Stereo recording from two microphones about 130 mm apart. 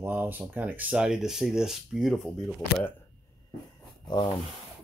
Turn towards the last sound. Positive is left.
turn(degrees=35)  # may be behind; listen again after turning